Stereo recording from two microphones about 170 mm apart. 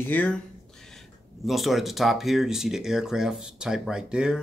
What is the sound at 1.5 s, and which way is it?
Speech, centre (ahead or behind).